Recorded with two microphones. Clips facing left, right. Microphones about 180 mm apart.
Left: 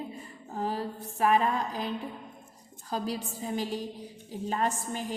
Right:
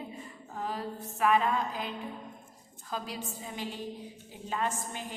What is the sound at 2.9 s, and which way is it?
A woman's voice, 35° left (ahead or behind).